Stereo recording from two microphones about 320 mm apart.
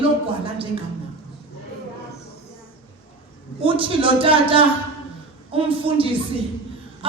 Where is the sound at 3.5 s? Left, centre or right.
Centre.